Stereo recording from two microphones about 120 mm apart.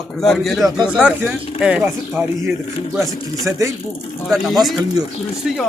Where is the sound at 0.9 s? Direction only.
10° right (ahead or behind).